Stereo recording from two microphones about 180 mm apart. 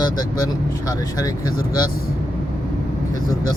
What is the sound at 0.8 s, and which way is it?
Speech, 20° left (ahead or behind).